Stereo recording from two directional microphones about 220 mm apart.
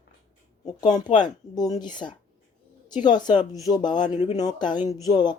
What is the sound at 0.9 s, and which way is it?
Speech, 20° left (ahead or behind).